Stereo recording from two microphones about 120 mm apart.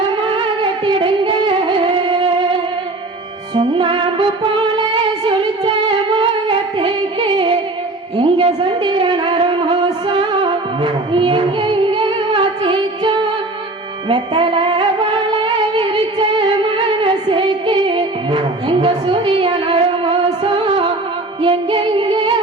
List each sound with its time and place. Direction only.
0.3 s music: 45° right (ahead or behind)
3.6 s music: 50° right (ahead or behind)
5.6 s music: 45° right (ahead or behind)
8.2 s a sound: 50° right (ahead or behind)
14.1 s music: 45° right (ahead or behind)